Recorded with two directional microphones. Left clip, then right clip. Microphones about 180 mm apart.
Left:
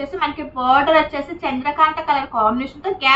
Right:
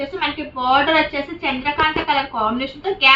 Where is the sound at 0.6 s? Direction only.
15° left (ahead or behind).